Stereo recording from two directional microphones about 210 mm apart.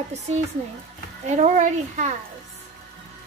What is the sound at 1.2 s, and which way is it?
Speech, 35° right (ahead or behind).